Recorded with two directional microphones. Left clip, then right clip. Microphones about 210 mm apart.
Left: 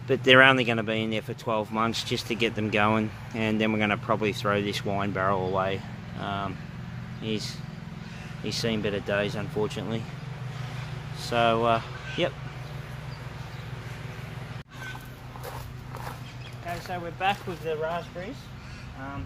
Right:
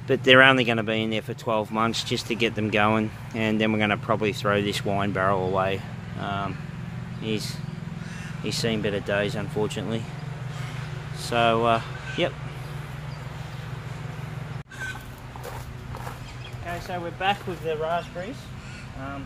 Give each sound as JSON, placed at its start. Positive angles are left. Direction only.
{"t": 0.1, "sound": "speech", "side_deg": 0}
{"t": 11.1, "sound": "speech", "side_deg": 0}
{"t": 16.6, "sound": "speech", "side_deg": 25}
{"t": 17.6, "sound": "speech", "side_deg": 5}